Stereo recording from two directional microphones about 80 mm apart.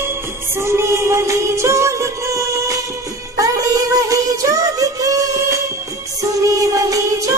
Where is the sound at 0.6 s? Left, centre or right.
Right.